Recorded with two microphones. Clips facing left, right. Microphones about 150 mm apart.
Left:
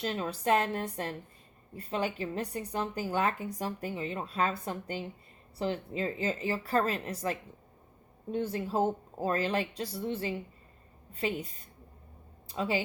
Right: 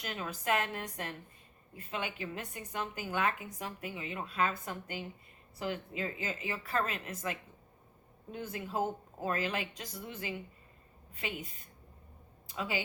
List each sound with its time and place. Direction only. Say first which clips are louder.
0.0 s speech: left 6 dB; 30° left (ahead or behind)